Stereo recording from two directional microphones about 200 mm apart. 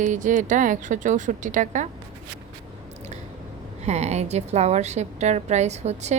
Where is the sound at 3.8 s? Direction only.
35° right (ahead or behind).